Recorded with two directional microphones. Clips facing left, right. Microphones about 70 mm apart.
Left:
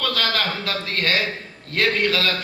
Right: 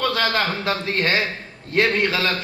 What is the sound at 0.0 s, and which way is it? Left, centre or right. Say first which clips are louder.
A man's voice: right 3 dB; right.